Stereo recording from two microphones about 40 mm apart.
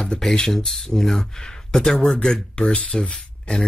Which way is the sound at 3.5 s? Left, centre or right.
Left.